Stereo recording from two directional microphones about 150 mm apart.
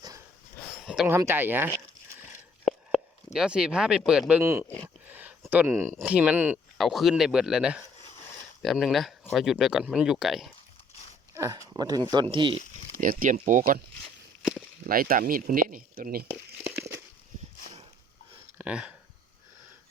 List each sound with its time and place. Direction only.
1.0 s speech: 15° right (ahead or behind)
3.3 s speech: 5° right (ahead or behind)
5.0 s a sound: 10° right (ahead or behind)
5.5 s speech: 15° right (ahead or behind)
6.7 s speech: centre (ahead or behind)
11.3 s speech: 20° right (ahead or behind)
12.2 s speech: 35° right (ahead or behind)
13.0 s speech: 65° right (ahead or behind)
14.8 s speech: 75° right (ahead or behind)
18.5 s a sound: 10° right (ahead or behind)